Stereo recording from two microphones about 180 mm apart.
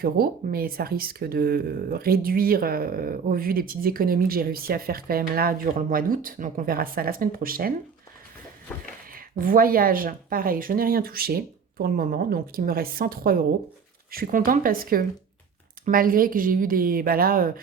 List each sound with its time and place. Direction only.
0.0 s speech: 55° right (ahead or behind)
9.1 s speech: 50° right (ahead or behind)